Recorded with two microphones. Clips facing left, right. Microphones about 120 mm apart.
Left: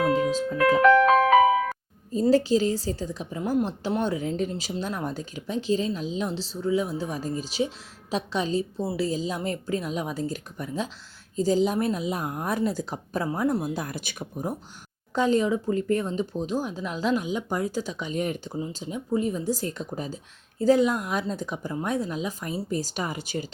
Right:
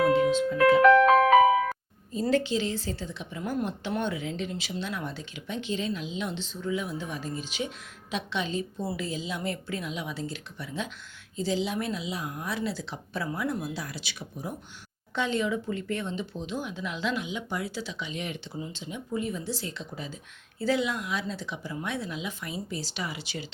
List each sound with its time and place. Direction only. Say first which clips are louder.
0.1 s music: right 1 dB; 40° left (ahead or behind)
2.3 s a woman's voice: left 5 dB; 40° left (ahead or behind)